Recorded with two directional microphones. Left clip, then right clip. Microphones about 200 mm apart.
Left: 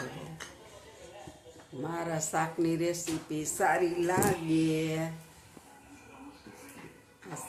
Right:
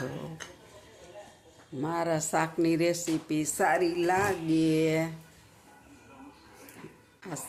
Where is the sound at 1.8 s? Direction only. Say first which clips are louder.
Right 5 dB; 45° right (ahead or behind).